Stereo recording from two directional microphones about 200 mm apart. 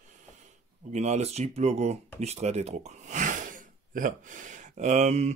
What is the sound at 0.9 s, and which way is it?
Speech, 35° right (ahead or behind).